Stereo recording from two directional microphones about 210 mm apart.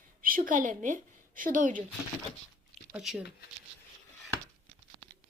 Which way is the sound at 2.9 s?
5° right (ahead or behind).